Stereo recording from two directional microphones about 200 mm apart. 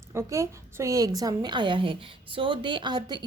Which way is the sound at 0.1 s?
15° right (ahead or behind).